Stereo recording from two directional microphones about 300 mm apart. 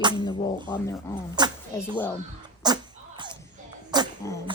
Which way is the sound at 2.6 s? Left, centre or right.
Centre.